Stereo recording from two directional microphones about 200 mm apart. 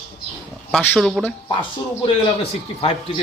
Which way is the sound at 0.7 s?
Centre (ahead or behind).